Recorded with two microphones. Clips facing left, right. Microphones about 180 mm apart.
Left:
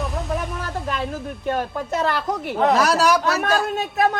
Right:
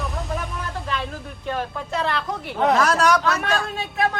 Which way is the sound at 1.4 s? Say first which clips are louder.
Left 3 dB; 45° left (ahead or behind).